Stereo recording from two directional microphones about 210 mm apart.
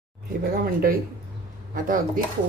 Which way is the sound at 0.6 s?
45° right (ahead or behind).